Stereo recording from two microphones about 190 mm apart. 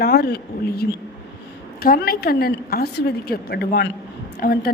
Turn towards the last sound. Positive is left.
turn(degrees=50)  # may be behind; listen again after turning